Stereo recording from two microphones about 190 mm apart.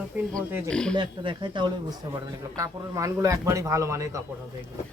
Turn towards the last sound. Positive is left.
turn(degrees=-15)  # may be behind; listen again after turning